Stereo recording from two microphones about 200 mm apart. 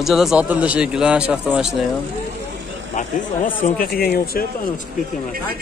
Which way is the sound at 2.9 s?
35° left (ahead or behind).